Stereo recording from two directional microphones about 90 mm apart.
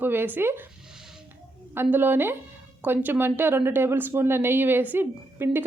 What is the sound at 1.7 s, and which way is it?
Speech, 25° right (ahead or behind).